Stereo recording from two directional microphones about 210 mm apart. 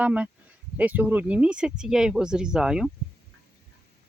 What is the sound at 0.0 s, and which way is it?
Speech, 5° right (ahead or behind).